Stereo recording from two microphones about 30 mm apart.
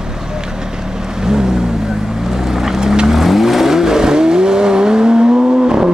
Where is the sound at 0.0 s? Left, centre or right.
Right.